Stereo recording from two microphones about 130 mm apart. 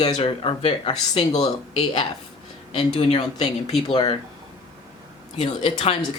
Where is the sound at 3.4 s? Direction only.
55° left (ahead or behind).